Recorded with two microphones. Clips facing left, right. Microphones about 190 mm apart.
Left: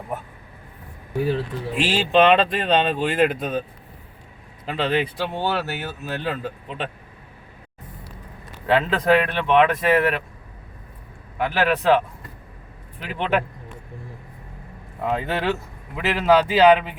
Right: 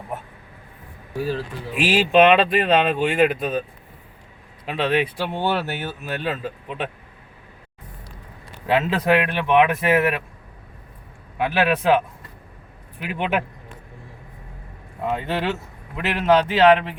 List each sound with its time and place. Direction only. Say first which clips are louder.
1.2 s speech: left 2 dB; 25° left (ahead or behind)
1.7 s speech: right 2 dB; 10° right (ahead or behind)
4.6 s speech: right 1 dB; centre (ahead or behind)
8.6 s speech: left 1 dB; 10° right (ahead or behind)
11.6 s speech: even; 15° right (ahead or behind)
13.0 s speech: left 1 dB; 10° right (ahead or behind)
15.2 s speech: left 1 dB; centre (ahead or behind)